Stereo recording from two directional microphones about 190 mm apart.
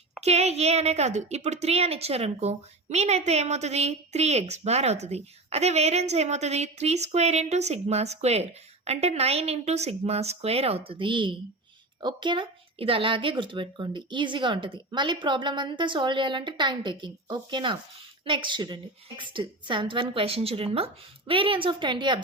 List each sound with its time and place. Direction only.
0.2 s a woman's voice: 35° right (ahead or behind)